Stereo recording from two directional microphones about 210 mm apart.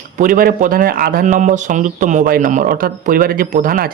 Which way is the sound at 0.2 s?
40° right (ahead or behind).